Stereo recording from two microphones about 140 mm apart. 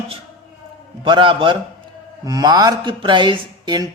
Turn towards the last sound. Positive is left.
turn(degrees=-30)  # may be behind; listen again after turning